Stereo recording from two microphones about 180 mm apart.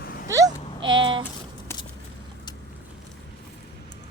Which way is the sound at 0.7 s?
90° right.